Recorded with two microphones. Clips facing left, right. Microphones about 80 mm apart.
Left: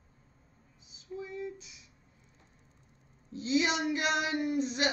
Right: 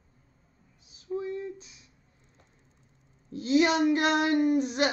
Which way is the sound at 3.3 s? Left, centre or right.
Right.